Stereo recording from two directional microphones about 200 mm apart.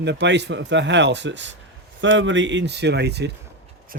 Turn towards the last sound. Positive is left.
turn(degrees=-55)  # may be behind; listen again after turning